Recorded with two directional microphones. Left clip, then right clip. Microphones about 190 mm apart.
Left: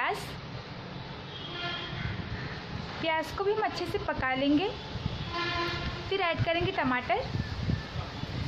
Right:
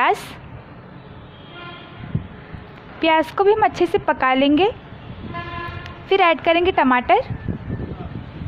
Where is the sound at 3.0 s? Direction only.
45° right (ahead or behind).